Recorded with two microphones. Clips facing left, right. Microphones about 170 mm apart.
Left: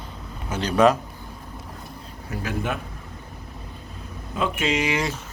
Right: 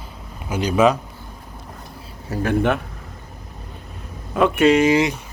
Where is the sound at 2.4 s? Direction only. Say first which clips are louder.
Right 9 dB; 65° right (ahead or behind).